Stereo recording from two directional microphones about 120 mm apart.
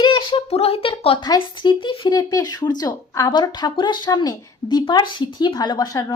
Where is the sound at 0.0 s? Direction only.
40° left (ahead or behind).